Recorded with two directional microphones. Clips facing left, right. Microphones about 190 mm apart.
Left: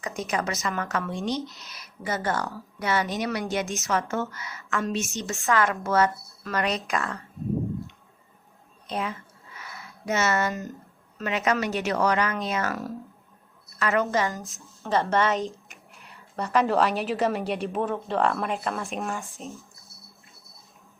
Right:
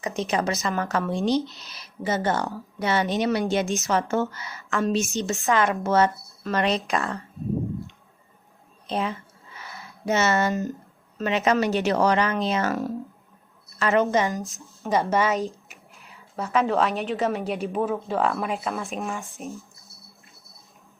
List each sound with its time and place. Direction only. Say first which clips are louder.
0.0 s speech: right 4 dB; 25° right (ahead or behind)
8.9 s speech: right 3 dB; 30° right (ahead or behind)
9.6 s a sound: right 2 dB; 35° right (ahead or behind)
11.2 s speech: right 4 dB; 25° right (ahead or behind)
15.0 s a woman's voice: right 1 dB; 5° right (ahead or behind)